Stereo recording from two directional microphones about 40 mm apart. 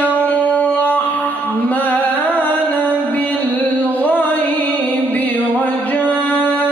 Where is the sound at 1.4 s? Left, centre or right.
Left.